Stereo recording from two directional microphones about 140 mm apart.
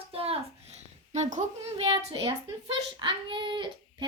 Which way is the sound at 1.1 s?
60° right (ahead or behind).